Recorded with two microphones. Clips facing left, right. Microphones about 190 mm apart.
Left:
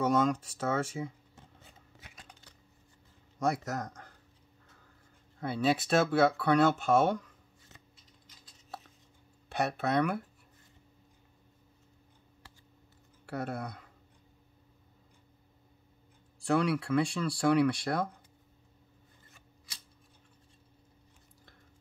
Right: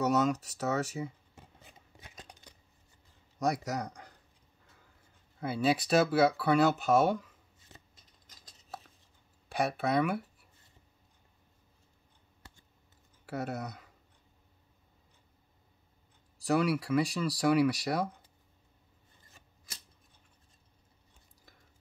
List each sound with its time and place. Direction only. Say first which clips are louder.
0.0 s speech: even; 5° right (ahead or behind)
2.0 s scissors: right 4 dB; 20° right (ahead or behind)
3.6 s speech: right 1 dB; 10° right (ahead or behind)
5.4 s speech: even; 5° right (ahead or behind)
9.6 s speech: even; 5° right (ahead or behind)
13.2 s speech: even; 5° right (ahead or behind)
16.4 s speech: even; 5° right (ahead or behind)